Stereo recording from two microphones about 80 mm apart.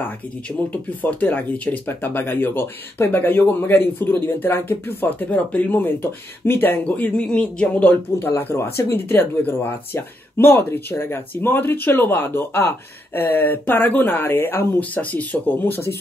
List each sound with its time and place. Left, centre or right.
1.2 s speech: centre